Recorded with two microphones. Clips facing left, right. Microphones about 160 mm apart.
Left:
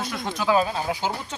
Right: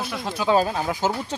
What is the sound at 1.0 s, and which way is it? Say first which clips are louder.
Speech: right 7 dB; 45° right (ahead or behind).